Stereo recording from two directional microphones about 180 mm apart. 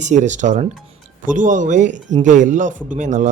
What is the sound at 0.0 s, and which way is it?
Speech, 40° right (ahead or behind).